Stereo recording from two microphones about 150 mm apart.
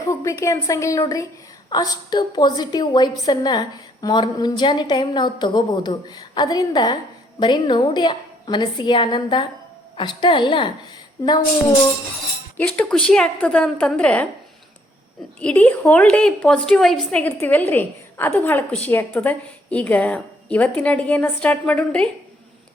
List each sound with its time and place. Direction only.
0.0 s a woman's voice: 20° left (ahead or behind)
12.5 s a woman's voice: 10° left (ahead or behind)
15.4 s a woman's voice: 10° left (ahead or behind)